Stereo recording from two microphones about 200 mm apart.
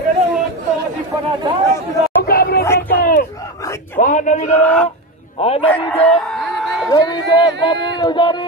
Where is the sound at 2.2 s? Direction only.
50° left (ahead or behind).